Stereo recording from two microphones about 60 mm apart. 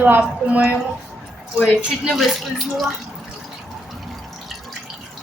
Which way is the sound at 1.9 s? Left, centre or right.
Centre.